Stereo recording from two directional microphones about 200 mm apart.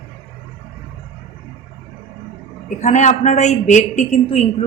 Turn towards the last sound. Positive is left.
turn(degrees=35)  # may be behind; listen again after turning